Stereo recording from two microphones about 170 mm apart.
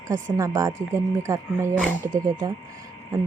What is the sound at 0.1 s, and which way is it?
Speech, 20° right (ahead or behind).